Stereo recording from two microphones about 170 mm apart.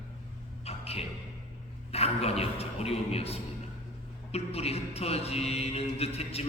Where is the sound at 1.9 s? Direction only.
35° left (ahead or behind).